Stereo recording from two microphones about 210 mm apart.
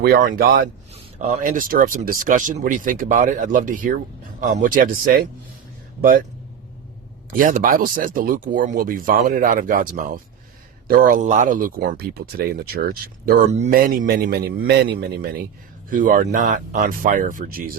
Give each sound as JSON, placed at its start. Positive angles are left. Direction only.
{"t": 0.0, "sound": "speech", "side_deg": -45}
{"t": 7.3, "sound": "speech", "side_deg": -40}